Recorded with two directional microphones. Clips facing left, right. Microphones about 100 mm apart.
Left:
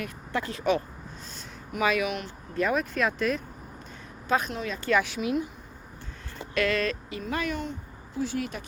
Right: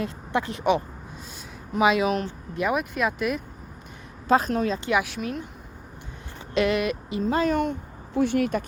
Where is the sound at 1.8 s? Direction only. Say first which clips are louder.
Right 5 dB; 20° right (ahead or behind).